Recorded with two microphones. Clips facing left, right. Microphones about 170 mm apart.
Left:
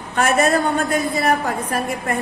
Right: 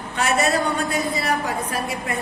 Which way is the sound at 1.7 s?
50° left (ahead or behind).